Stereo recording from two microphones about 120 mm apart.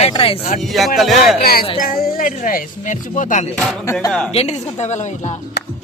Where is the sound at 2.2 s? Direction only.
90° left.